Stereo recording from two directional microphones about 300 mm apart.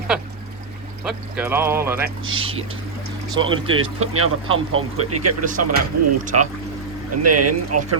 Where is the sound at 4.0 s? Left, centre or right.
Right.